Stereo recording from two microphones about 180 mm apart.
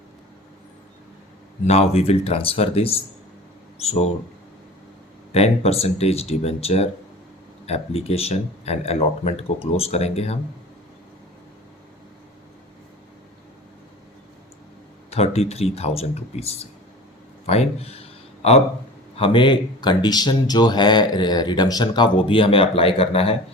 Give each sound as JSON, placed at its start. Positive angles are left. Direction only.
{"t": 1.6, "sound": "speech", "side_deg": 35}
{"t": 5.3, "sound": "speech", "side_deg": 35}
{"t": 15.1, "sound": "speech", "side_deg": 35}
{"t": 17.4, "sound": "a sound", "side_deg": 35}
{"t": 19.1, "sound": "speech", "side_deg": 30}